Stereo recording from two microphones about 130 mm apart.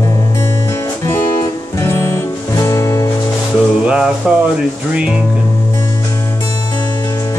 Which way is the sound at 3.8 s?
10° right (ahead or behind).